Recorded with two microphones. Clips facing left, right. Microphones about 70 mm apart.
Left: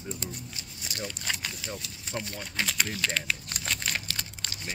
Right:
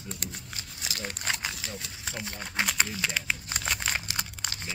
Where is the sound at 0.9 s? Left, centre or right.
Right.